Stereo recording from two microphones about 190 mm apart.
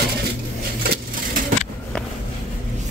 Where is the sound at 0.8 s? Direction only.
50° right (ahead or behind).